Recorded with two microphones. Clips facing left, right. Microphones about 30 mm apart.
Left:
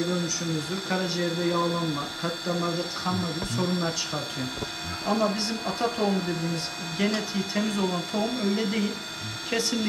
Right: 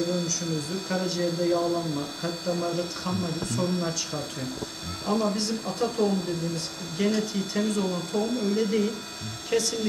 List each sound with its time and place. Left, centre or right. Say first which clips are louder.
0.9 s speech: even; left